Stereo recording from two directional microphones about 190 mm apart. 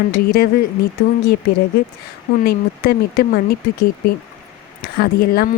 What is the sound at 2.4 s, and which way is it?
A woman's voice, 55° left (ahead or behind).